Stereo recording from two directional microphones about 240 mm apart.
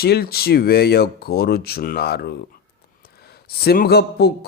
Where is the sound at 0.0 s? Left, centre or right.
Left.